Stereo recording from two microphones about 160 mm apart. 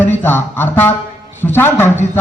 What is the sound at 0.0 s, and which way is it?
A man's voice, 15° left (ahead or behind).